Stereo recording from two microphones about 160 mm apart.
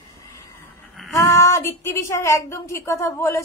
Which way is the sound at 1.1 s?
20° left (ahead or behind).